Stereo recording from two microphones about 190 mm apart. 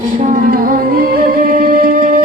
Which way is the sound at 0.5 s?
50° right (ahead or behind).